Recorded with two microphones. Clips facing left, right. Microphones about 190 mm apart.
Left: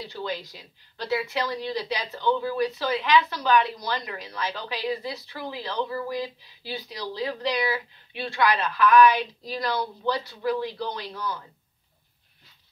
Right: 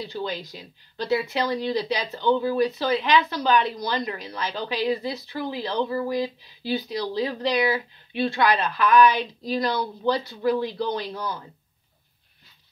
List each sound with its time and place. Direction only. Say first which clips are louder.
0.1 s speech: right 2 dB; 20° right (ahead or behind)